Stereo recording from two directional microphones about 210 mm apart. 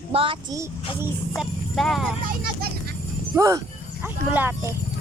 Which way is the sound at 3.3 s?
15° right (ahead or behind).